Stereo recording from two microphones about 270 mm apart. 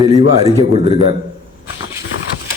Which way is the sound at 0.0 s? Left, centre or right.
Centre.